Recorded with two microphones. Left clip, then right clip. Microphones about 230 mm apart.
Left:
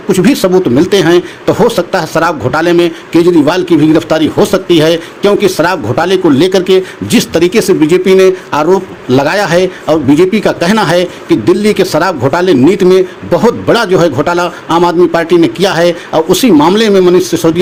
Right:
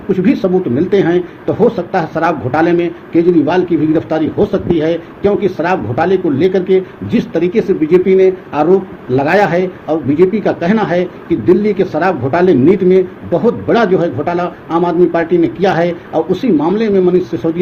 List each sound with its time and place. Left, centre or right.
0.1 s speech: left